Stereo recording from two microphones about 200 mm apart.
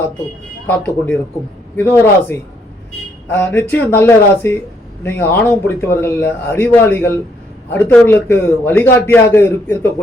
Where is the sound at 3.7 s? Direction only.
10° left (ahead or behind).